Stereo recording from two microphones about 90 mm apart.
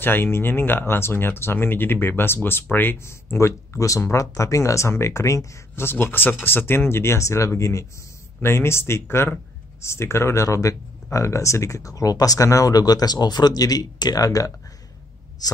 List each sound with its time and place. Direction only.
0.0 s speech: 25° left (ahead or behind)
3.3 s speech: 35° left (ahead or behind)